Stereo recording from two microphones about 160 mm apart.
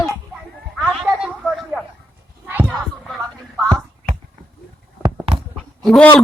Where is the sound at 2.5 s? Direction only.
10° right (ahead or behind).